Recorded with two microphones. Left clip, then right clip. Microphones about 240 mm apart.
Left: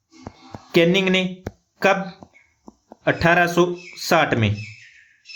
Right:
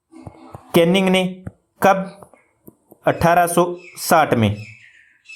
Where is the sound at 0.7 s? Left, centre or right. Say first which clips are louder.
Right 2 dB; centre.